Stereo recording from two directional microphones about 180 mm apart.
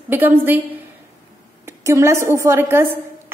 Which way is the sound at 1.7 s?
15° right (ahead or behind).